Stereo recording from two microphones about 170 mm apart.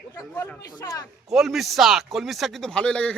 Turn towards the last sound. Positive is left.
turn(degrees=5)  # may be behind; listen again after turning